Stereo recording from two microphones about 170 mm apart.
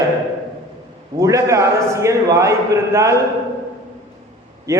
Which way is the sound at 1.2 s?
20° right (ahead or behind).